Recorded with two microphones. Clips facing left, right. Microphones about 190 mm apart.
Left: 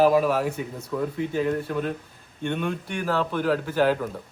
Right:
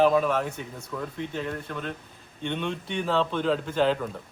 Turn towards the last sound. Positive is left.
turn(degrees=5)  # may be behind; listen again after turning